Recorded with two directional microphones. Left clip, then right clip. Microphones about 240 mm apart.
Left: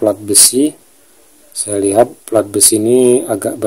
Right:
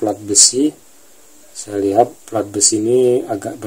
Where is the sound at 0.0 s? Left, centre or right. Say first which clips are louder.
Left 2 dB; left.